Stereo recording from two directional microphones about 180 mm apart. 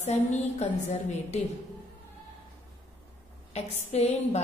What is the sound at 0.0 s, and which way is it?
A woman's voice, 40° left (ahead or behind).